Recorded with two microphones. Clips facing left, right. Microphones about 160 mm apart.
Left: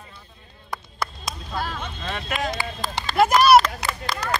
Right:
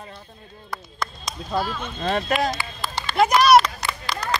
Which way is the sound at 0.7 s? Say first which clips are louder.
Left 1 dB; 10° left (ahead or behind).